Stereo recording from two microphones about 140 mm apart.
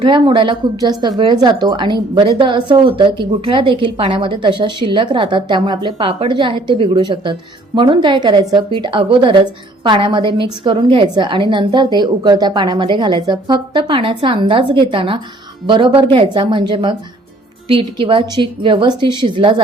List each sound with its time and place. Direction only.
0.0 s a woman's voice: 35° right (ahead or behind)